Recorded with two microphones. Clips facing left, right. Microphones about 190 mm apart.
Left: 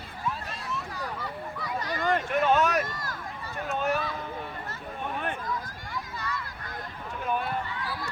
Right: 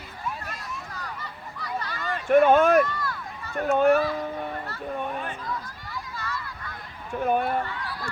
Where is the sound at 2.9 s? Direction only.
40° left (ahead or behind).